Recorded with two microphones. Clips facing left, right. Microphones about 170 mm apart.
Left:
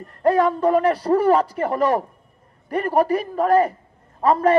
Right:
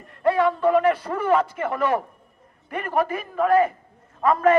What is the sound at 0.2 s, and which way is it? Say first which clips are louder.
A man's voice: left 2 dB; 40° left (ahead or behind).